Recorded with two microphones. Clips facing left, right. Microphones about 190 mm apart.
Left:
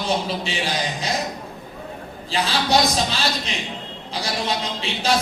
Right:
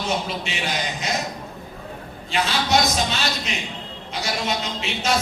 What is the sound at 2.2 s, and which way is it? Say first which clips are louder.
A man's voice: left 1 dB; 35° left (ahead or behind).